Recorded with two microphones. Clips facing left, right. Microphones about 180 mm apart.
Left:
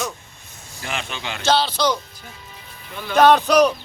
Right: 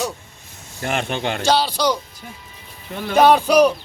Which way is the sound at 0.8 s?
50° right (ahead or behind).